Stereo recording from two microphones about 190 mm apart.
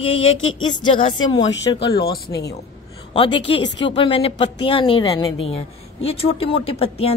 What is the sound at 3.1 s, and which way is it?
Speech, 30° left (ahead or behind).